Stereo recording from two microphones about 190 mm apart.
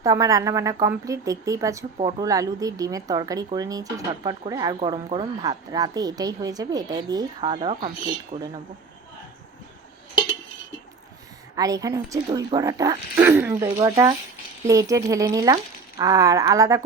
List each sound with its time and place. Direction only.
0.0 s a woman's voice: 15° right (ahead or behind)
11.5 s a woman's voice: 20° right (ahead or behind)